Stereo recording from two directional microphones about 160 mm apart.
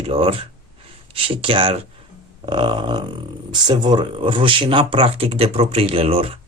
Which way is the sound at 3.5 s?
30° right (ahead or behind).